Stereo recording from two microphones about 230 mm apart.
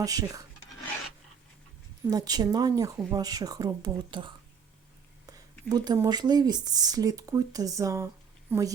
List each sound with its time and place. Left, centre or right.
0.0 s speech: centre
2.0 s speech: centre